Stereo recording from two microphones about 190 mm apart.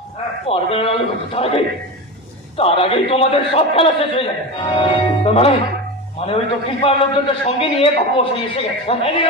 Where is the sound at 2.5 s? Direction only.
30° left (ahead or behind).